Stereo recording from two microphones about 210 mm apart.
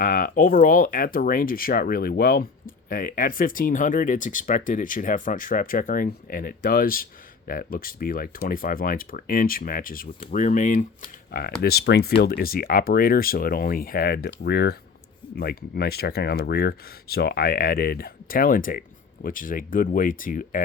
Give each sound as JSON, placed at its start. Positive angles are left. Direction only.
{"t": 0.0, "sound": "speech", "side_deg": 40}